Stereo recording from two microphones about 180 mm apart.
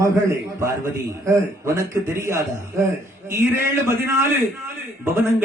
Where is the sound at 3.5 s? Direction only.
15° right (ahead or behind).